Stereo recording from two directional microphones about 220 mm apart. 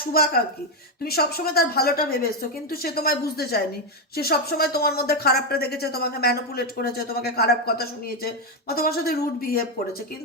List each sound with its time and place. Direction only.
0.0 s speech: 45° left (ahead or behind)